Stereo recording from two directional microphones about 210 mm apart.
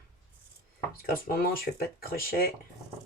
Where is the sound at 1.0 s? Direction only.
45° left (ahead or behind).